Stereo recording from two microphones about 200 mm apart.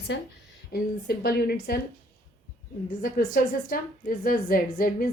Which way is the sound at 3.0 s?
45° left (ahead or behind).